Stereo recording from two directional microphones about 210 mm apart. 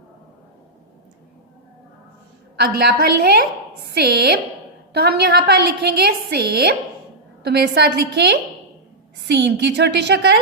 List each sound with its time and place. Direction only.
2.6 s a woman's voice: 50° right (ahead or behind)